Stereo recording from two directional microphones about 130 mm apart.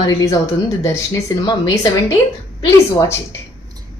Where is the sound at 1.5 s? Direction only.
30° left (ahead or behind).